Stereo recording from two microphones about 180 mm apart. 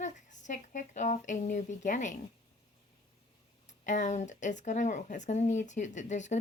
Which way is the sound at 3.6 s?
45° left (ahead or behind).